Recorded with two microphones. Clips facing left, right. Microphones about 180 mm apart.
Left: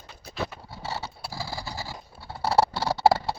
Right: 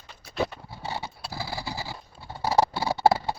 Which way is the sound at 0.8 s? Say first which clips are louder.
Even; 15° right (ahead or behind).